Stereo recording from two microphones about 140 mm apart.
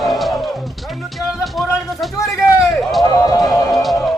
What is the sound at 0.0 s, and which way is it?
Music, centre (ahead or behind).